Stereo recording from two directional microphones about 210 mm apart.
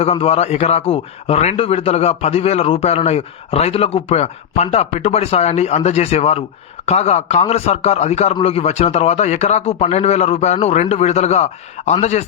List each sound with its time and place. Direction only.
0.0 s a man's voice: 25° left (ahead or behind)